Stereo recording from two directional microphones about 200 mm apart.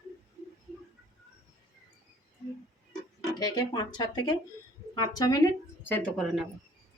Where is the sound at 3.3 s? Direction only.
20° left (ahead or behind).